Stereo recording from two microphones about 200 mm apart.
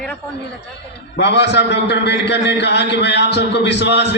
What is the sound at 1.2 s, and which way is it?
A man's voice, 60° left (ahead or behind).